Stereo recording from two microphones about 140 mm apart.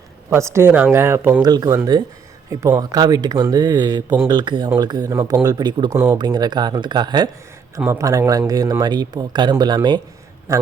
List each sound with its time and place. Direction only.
0.3 s speech: 20° right (ahead or behind)
1.4 s speech: 30° right (ahead or behind)
5.9 s speech: 20° right (ahead or behind)
6.1 s a man's voice: 30° right (ahead or behind)